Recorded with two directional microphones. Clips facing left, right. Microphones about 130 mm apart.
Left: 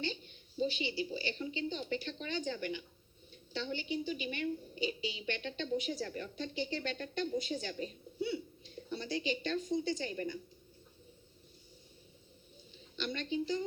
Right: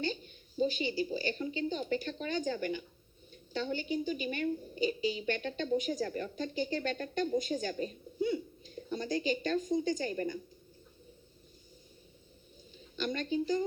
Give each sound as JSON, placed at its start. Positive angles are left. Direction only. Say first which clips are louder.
{"t": 0.0, "sound": "a woman's voice", "louder": "right 4 dB", "side_deg": -45}
{"t": 12.7, "sound": "a woman's voice", "louder": "right 4 dB", "side_deg": -45}